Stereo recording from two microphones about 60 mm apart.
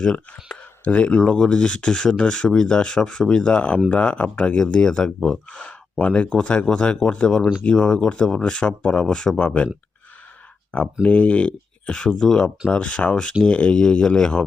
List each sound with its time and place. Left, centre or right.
0.0 s speech: centre
11.0 s speech: left